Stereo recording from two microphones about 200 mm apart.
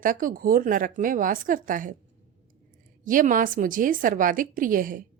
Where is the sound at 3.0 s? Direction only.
40° right (ahead or behind).